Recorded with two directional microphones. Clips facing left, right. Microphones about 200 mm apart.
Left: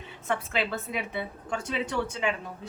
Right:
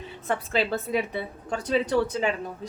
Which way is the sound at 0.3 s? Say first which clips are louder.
Right 3 dB; 35° right (ahead or behind).